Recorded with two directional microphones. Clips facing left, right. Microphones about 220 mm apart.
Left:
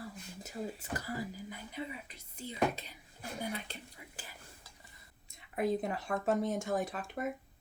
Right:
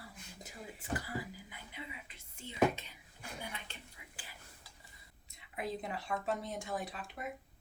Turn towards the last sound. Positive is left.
turn(degrees=45)  # may be behind; listen again after turning